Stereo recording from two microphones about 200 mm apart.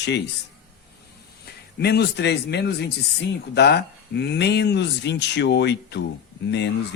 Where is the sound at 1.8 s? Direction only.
55° left (ahead or behind).